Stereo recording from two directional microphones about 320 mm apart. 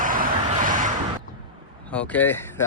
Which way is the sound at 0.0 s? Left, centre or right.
Right.